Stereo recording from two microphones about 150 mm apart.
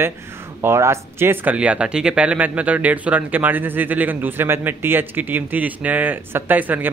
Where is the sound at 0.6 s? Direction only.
20° right (ahead or behind).